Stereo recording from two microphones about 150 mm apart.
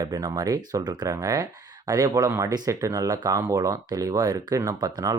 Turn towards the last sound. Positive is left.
turn(degrees=-25)  # may be behind; listen again after turning